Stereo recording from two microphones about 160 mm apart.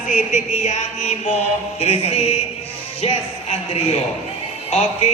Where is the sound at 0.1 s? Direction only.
50° left (ahead or behind).